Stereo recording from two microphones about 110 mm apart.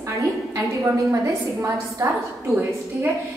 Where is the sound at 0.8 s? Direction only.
25° right (ahead or behind).